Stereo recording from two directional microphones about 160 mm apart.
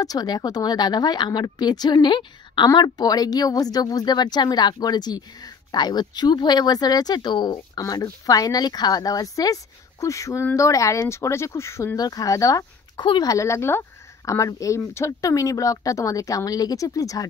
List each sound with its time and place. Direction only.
0.0 s speech: 25° left (ahead or behind)